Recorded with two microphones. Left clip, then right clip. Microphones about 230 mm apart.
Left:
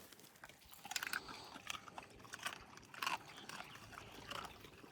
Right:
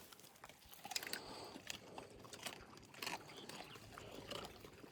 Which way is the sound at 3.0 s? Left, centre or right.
Left.